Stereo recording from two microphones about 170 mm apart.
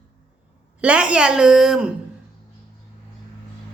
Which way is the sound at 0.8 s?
5° right (ahead or behind).